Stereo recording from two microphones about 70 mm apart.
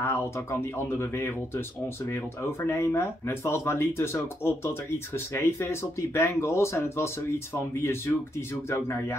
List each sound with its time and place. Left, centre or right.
0.0 s speech: left
2.6 s speech: left